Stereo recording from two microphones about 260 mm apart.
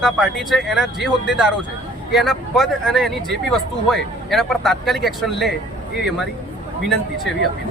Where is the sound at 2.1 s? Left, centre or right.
Centre.